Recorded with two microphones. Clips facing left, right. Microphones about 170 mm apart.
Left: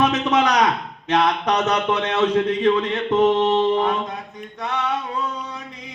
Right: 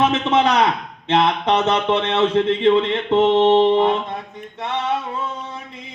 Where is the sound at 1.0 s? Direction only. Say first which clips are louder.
Right 2 dB; 25° right (ahead or behind).